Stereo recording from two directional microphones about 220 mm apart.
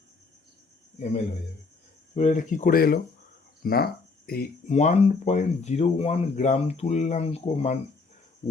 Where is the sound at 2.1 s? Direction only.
35° left (ahead or behind).